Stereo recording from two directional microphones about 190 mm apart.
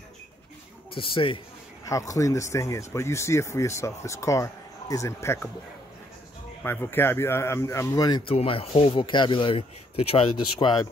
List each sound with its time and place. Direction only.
0.9 s speech: 30° left (ahead or behind)
1.9 s speech: 15° left (ahead or behind)
6.6 s speech: 10° left (ahead or behind)